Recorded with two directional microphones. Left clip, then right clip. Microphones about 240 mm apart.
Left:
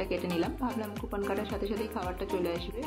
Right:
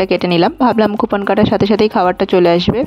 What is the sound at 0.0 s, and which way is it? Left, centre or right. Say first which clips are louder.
Speech: right 19 dB; right.